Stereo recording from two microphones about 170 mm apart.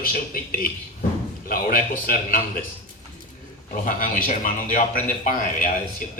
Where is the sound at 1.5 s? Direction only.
55° left (ahead or behind).